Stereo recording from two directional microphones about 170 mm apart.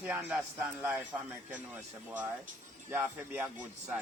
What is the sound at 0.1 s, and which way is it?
Speech, 10° right (ahead or behind).